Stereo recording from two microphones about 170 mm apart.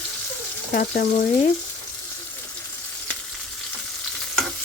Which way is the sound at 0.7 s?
55° left (ahead or behind).